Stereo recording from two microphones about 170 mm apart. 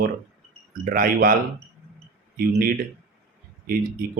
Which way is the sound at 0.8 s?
55° right (ahead or behind).